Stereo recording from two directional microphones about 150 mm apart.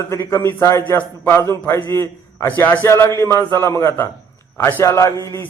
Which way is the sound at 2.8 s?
20° left (ahead or behind).